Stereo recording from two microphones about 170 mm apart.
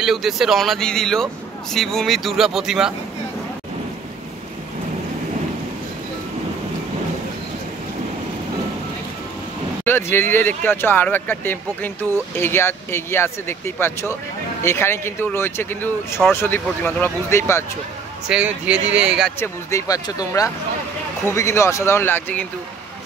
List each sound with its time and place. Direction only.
0.0 s a man's voice: centre (ahead or behind)
9.8 s speech: 10° left (ahead or behind)
18.3 s speech: 5° right (ahead or behind)
19.4 s speech: 20° left (ahead or behind)